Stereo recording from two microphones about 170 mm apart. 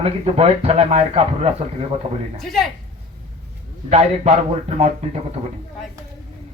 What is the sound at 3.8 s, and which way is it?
A man's voice, 40° right (ahead or behind).